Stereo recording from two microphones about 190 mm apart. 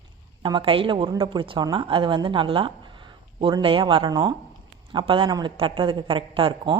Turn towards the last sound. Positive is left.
turn(degrees=-25)  # may be behind; listen again after turning